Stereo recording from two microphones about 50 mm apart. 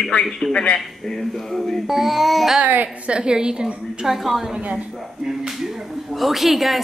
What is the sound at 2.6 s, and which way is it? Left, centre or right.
Speech, right.